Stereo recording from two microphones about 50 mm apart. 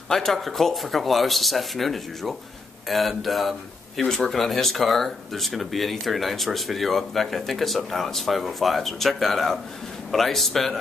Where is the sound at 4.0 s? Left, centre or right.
Centre.